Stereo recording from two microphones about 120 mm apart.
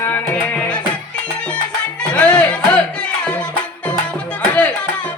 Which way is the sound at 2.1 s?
10° left (ahead or behind).